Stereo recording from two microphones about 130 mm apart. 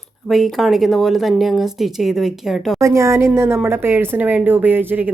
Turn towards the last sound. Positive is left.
turn(degrees=-15)  # may be behind; listen again after turning